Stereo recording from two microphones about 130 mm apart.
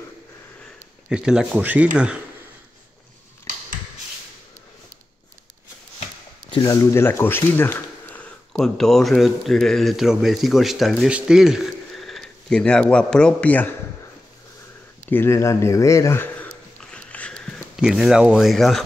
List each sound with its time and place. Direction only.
1.0 s speech: 5° right (ahead or behind)
6.6 s speech: 25° left (ahead or behind)
8.5 s speech: 5° left (ahead or behind)
15.0 s a sound: 15° left (ahead or behind)
17.7 s speech: 5° right (ahead or behind)